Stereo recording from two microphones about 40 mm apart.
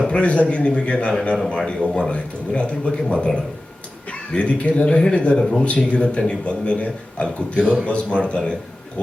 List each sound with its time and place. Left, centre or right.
0.1 s a man's voice: left
5.4 s speech: centre
5.6 s a man's voice: left